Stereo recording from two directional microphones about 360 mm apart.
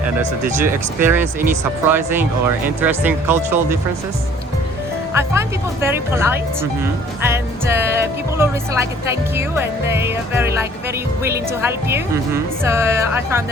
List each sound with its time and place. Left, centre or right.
0.6 s speech: centre
5.1 s speech: centre